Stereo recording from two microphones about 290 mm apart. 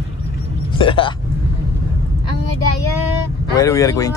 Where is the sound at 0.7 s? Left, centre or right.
Centre.